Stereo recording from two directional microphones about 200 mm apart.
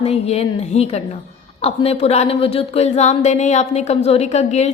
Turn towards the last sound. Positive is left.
turn(degrees=35)  # may be behind; listen again after turning